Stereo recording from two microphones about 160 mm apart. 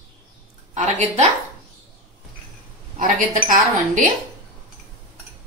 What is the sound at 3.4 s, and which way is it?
Speech, 55° right (ahead or behind).